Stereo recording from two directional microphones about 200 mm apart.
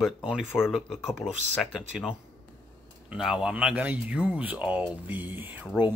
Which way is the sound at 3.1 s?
5° right (ahead or behind).